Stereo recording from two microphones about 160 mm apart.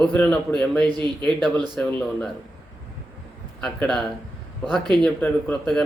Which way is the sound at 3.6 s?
5° left (ahead or behind).